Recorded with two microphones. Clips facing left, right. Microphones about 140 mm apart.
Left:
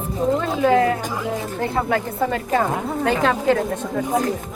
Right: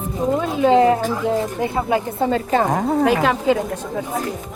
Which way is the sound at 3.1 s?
5° right (ahead or behind).